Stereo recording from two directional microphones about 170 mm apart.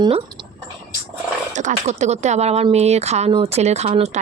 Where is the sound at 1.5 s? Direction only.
45° right (ahead or behind).